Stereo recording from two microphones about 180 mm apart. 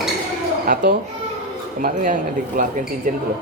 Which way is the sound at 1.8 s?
45° right (ahead or behind).